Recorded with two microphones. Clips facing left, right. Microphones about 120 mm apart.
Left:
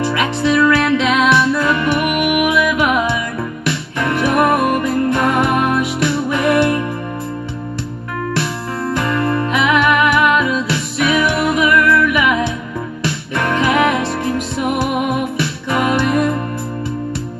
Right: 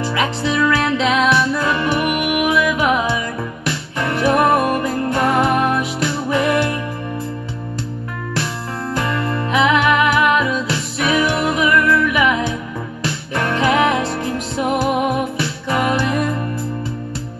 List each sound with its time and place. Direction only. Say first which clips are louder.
0.5 s music: left 5 dB; 40° right (ahead or behind)
9.0 s music: left 5 dB; 50° left (ahead or behind)
9.6 s music: right 1 dB; 40° right (ahead or behind)
13.6 s music: left 1 dB; 40° right (ahead or behind)
16.1 s music: left 4 dB; 55° left (ahead or behind)